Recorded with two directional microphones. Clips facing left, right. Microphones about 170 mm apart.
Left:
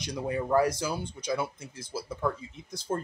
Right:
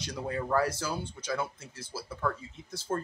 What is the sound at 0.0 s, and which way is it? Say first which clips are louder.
Speech: left 3 dB; 15° left (ahead or behind).